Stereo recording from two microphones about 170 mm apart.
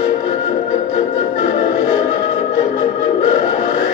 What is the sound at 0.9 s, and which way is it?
Music, 40° left (ahead or behind).